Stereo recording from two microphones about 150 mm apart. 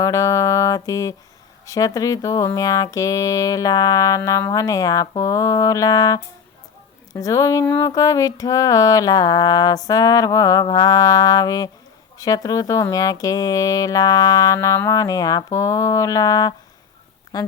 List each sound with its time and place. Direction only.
0.0 s speech: 20° left (ahead or behind)
7.6 s a sound: 15° left (ahead or behind)
7.9 s a woman's voice: 25° left (ahead or behind)